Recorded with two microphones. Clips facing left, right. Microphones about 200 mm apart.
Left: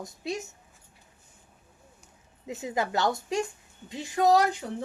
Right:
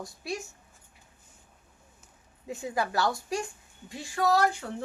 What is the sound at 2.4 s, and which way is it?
A woman's voice, 20° left (ahead or behind).